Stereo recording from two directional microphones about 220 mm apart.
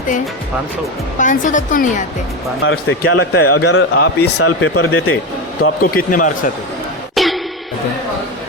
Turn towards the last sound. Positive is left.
turn(degrees=0)  # may be behind; listen again after turning